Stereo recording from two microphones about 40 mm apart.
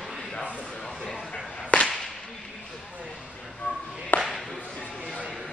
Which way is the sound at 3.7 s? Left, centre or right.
Right.